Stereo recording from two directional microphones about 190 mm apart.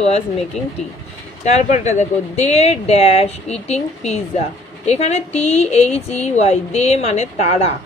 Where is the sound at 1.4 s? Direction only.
35° left (ahead or behind).